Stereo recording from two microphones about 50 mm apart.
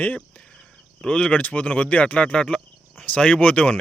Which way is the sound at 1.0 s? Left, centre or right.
Left.